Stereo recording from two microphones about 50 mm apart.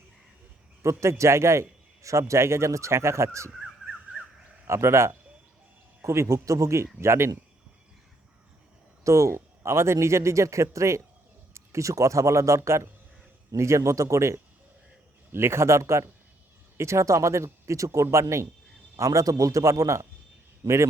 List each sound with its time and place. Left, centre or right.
0.8 s a man's voice: right
4.6 s speech: right
6.0 s speech: right
7.0 s speech: right
9.0 s a man's voice: right
15.3 s a man's voice: right
18.9 s a man's voice: right